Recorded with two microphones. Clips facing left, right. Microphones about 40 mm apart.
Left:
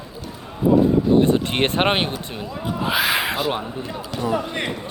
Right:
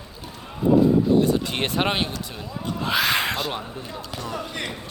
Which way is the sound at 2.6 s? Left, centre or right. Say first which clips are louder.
Left 2 dB; centre.